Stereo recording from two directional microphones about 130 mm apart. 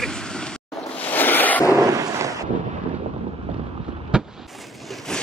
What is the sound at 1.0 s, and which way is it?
Boat, 15° left (ahead or behind).